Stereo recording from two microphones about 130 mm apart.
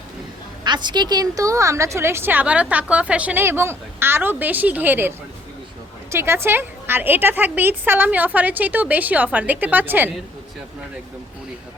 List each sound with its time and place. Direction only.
0.6 s a woman's voice: 35° right (ahead or behind); by 10.1 s 15° right (ahead or behind)